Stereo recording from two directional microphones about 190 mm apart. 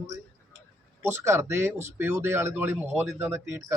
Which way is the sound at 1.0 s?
15° right (ahead or behind).